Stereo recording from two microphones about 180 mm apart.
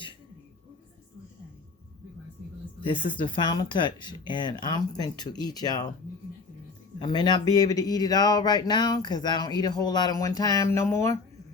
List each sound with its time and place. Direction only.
2.8 s speech: 25° left (ahead or behind)
7.0 s speech: 25° left (ahead or behind)